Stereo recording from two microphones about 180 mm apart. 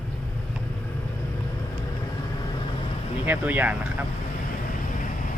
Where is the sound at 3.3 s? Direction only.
10° right (ahead or behind).